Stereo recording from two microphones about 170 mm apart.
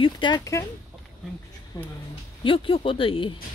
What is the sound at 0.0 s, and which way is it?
Speech, 25° left (ahead or behind).